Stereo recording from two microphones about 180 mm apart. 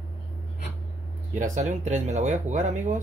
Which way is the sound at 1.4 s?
40° right (ahead or behind).